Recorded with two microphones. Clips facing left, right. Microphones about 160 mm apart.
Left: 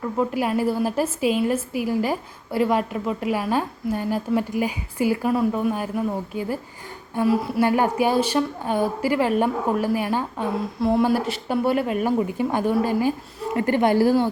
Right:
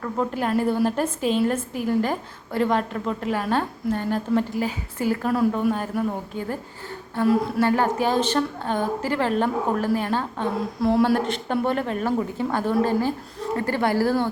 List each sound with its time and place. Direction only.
0.0 s a woman's voice: 10° left (ahead or behind)